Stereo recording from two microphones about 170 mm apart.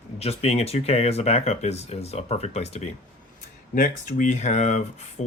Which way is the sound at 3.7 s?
50° left (ahead or behind).